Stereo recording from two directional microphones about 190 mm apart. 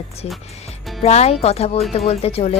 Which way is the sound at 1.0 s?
35° left (ahead or behind).